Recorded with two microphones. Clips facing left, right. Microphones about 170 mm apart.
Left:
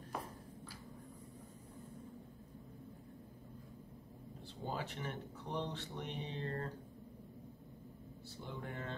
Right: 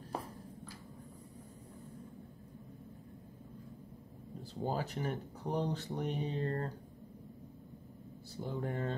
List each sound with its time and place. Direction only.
0.1 s squish: 30° right (ahead or behind)
4.6 s speech: 40° right (ahead or behind)
8.4 s speech: 40° right (ahead or behind)